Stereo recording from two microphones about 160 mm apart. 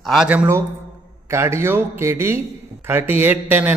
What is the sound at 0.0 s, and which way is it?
A man's voice, centre (ahead or behind).